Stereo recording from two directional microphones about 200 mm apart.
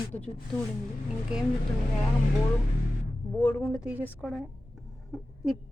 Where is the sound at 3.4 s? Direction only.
10° left (ahead or behind).